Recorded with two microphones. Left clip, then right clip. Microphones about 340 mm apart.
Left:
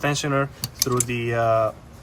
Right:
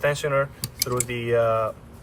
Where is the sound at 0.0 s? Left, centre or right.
Centre.